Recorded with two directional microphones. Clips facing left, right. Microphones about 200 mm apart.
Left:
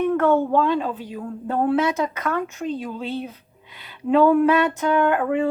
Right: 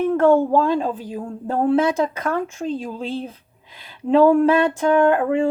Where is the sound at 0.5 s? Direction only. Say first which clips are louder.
Right 2 dB; 45° right (ahead or behind).